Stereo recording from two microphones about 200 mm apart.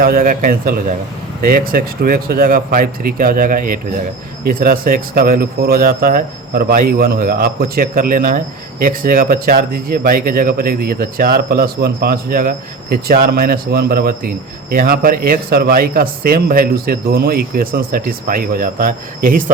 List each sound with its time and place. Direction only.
0.0 s speech: 45° right (ahead or behind)